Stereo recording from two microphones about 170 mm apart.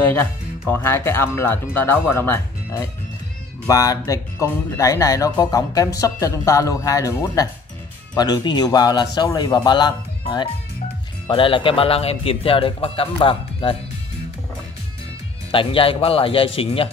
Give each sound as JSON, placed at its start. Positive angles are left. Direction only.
{"t": 0.1, "sound": "a man's voice", "side_deg": 10}
{"t": 15.5, "sound": "a man's voice", "side_deg": 30}